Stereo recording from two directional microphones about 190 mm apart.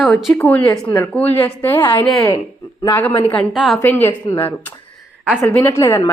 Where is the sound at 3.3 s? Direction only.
Centre (ahead or behind).